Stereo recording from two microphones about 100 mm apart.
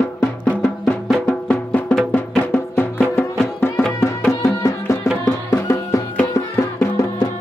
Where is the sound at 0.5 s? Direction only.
10° left (ahead or behind); by 6.0 s 30° left (ahead or behind).